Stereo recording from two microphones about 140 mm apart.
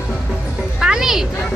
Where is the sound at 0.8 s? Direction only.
5° right (ahead or behind).